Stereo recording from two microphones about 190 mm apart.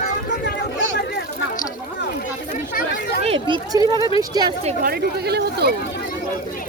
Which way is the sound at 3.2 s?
30° right (ahead or behind).